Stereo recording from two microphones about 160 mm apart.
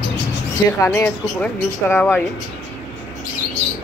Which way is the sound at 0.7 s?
15° left (ahead or behind).